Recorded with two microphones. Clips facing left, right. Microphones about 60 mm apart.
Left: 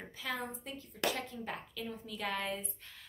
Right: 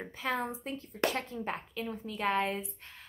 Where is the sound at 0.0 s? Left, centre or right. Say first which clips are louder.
Right 6 dB; right.